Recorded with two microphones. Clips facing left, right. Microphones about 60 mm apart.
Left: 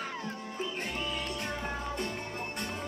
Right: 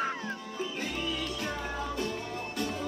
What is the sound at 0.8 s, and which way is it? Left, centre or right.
Music, left.